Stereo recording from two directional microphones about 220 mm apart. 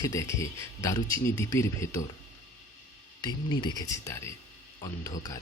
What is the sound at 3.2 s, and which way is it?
Speech, 20° left (ahead or behind).